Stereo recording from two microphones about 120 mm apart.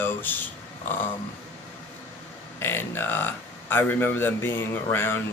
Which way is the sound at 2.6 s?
20° left (ahead or behind).